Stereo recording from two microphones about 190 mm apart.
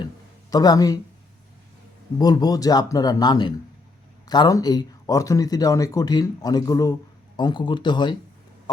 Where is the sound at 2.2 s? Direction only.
20° left (ahead or behind).